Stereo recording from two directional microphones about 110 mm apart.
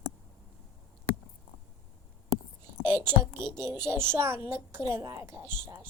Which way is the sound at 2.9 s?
20° right (ahead or behind).